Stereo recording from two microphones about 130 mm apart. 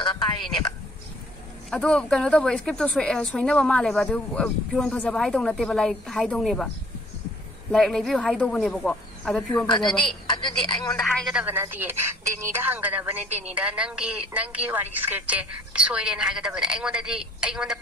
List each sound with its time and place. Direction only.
0.0 s a sound: 35° left (ahead or behind)
1.7 s a woman's voice: 5° left (ahead or behind)
7.7 s speech: 5° left (ahead or behind)
10.0 s a woman's voice: 35° left (ahead or behind)
11.0 s speech: 5° left (ahead or behind)
11.3 s a woman's voice: 15° right (ahead or behind)